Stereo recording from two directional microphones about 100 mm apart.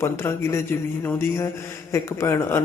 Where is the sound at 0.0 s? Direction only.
25° left (ahead or behind).